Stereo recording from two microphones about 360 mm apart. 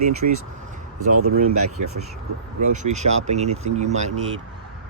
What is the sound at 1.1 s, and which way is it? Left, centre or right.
Speech, right.